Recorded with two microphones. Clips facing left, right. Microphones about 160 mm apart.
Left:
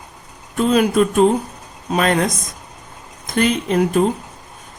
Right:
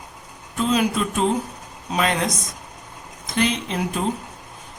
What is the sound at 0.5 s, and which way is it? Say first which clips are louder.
Speech: left 6 dB; 55° left (ahead or behind).